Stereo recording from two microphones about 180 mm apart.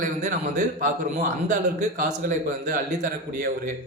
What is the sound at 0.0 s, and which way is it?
Speech, 45° right (ahead or behind).